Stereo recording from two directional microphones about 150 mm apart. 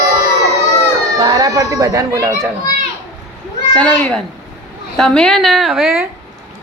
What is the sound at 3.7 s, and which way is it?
A child's voice, 5° left (ahead or behind).